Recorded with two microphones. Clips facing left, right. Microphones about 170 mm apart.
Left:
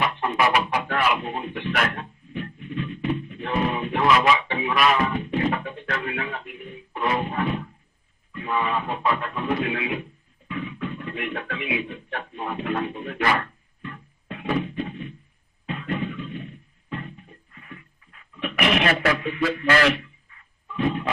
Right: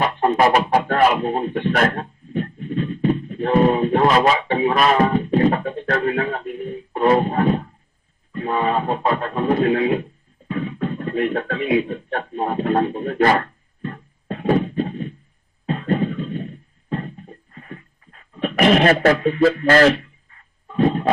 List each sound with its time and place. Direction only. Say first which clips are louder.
0.0 s music: right 6 dB; 40° right (ahead or behind)